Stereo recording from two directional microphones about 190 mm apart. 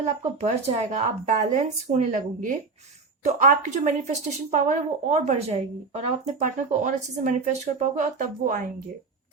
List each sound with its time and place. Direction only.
0.3 s speech: 35° right (ahead or behind)